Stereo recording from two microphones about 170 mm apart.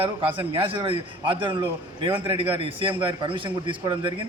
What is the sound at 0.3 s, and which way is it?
A man's voice, 30° right (ahead or behind).